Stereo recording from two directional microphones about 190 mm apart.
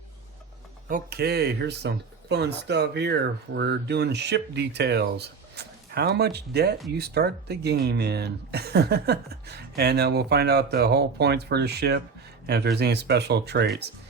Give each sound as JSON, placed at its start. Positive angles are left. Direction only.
{"t": 0.9, "sound": "speech", "side_deg": -50}